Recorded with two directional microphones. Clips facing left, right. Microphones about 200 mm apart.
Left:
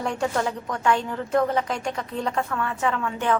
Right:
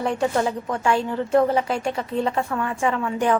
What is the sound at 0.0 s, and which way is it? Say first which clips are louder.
A woman's voice: right 3 dB; 5° right (ahead or behind).